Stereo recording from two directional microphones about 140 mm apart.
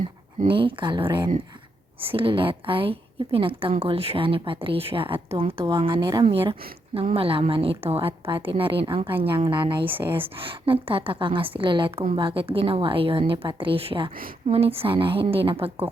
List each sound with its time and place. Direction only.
0.4 s a woman's voice: 35° right (ahead or behind)